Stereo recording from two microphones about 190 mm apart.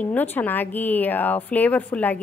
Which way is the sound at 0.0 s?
10° left (ahead or behind).